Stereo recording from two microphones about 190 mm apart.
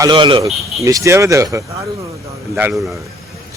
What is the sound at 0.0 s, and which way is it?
Speech, 25° right (ahead or behind).